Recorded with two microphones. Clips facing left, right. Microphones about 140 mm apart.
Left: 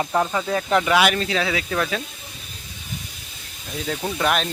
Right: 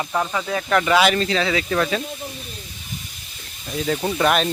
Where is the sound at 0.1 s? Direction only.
20° left (ahead or behind).